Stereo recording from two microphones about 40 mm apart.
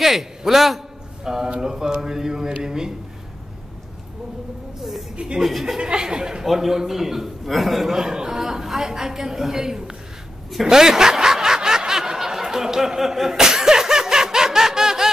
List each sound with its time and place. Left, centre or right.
0.0 s a man's voice: centre
5.1 s speech: right
5.4 s a man's voice: centre
5.8 s speech: centre
6.4 s a man's voice: centre
10.7 s snicker: centre